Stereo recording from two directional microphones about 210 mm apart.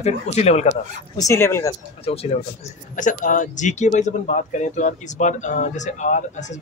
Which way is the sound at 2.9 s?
40° left (ahead or behind).